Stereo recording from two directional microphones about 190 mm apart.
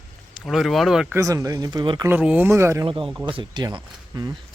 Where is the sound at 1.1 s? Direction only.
15° right (ahead or behind).